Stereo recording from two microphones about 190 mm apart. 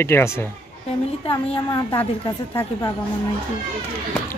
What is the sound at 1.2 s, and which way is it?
Speech, 25° left (ahead or behind).